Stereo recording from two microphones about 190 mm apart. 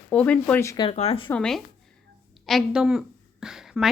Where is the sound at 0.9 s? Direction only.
30° left (ahead or behind).